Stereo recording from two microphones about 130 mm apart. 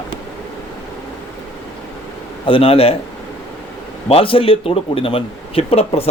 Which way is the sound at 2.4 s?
45° left (ahead or behind).